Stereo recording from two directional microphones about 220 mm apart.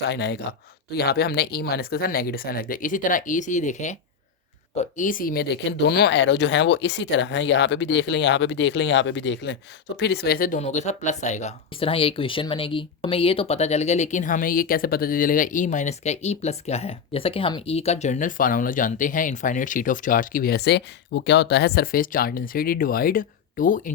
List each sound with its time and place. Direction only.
0.1 s speech: 50° left (ahead or behind)